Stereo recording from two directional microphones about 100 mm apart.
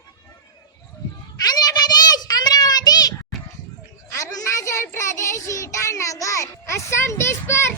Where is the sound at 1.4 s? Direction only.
40° left (ahead or behind).